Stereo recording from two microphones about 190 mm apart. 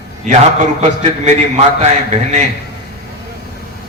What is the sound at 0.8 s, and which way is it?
A man's voice, 35° right (ahead or behind).